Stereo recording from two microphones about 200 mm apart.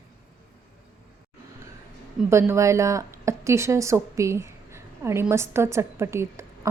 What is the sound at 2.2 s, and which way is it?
Speech, 15° right (ahead or behind).